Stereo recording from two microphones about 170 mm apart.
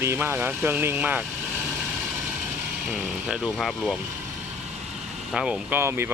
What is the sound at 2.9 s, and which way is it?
Speech, 5° right (ahead or behind).